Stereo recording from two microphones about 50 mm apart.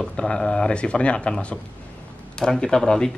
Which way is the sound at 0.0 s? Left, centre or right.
Centre.